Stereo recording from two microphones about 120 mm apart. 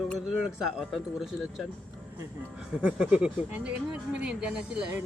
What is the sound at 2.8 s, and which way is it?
Speech, 10° right (ahead or behind).